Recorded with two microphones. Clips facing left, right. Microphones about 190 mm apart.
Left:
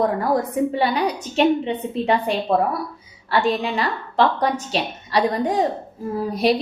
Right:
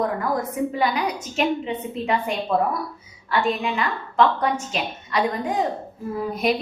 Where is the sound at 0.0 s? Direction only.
30° left (ahead or behind).